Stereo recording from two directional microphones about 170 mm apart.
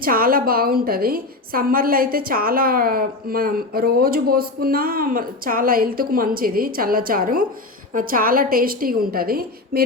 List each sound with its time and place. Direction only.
0.0 s a woman's voice: 55° right (ahead or behind)